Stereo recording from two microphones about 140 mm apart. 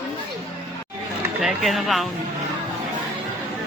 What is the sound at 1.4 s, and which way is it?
Speech, centre (ahead or behind).